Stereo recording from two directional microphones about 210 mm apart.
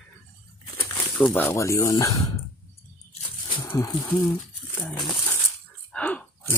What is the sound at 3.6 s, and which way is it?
Speech, 15° left (ahead or behind).